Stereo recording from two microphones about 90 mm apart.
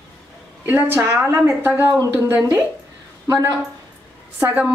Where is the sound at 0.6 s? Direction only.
20° right (ahead or behind).